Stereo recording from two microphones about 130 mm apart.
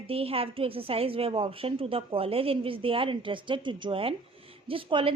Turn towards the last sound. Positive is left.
turn(degrees=-40)  # may be behind; listen again after turning